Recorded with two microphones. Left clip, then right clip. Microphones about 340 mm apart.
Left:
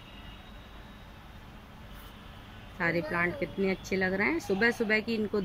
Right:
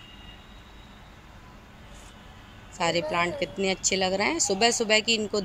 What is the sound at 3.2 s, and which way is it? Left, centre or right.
Speech, right.